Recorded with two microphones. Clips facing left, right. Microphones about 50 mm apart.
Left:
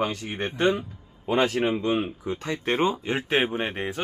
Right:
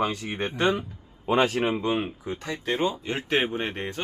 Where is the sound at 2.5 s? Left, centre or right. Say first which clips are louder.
Left 2 dB; left.